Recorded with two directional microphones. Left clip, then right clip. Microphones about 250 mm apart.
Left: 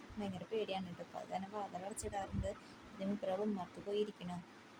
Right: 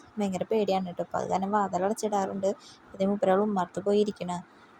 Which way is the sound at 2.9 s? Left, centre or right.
Right.